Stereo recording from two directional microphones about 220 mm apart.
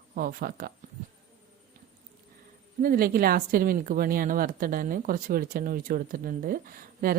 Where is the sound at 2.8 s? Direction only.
40° right (ahead or behind).